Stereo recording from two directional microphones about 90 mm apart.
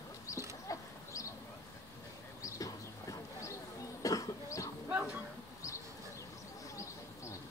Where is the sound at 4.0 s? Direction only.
40° left (ahead or behind).